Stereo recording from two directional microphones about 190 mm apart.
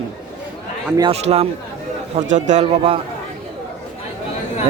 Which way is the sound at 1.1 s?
35° right (ahead or behind).